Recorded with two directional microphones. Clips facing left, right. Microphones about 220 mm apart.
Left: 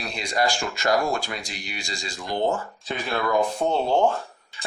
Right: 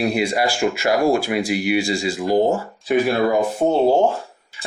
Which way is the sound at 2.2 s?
35° right (ahead or behind).